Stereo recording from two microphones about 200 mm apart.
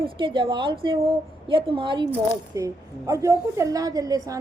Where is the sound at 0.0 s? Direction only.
25° right (ahead or behind).